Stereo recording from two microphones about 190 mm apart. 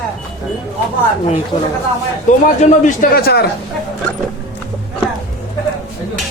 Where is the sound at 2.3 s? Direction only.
40° left (ahead or behind); by 3.5 s 55° left (ahead or behind).